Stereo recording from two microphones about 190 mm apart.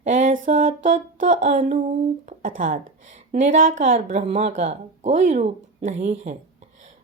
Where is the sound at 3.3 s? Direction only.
40° right (ahead or behind).